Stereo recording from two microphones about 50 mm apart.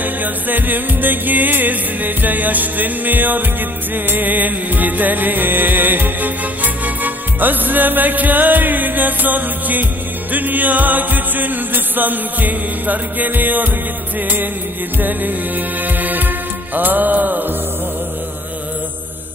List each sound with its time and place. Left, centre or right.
0.0 s music: right
15.0 s music: right